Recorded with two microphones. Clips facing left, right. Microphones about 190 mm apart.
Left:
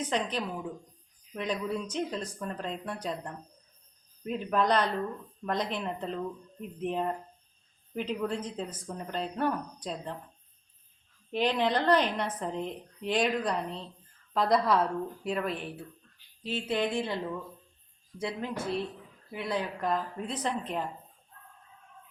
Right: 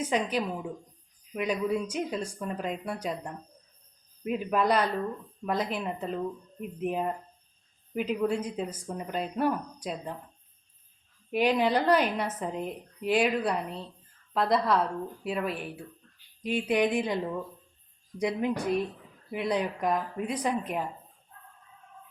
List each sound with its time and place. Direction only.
0.0 s a woman's voice: 10° right (ahead or behind)
11.3 s a woman's voice: 10° right (ahead or behind)
18.2 s a woman's voice: 15° right (ahead or behind)